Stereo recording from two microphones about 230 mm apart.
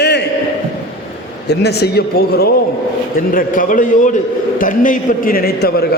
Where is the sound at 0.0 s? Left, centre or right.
Left.